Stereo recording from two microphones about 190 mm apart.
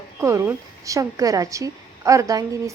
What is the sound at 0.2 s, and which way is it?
A woman's voice, 15° right (ahead or behind).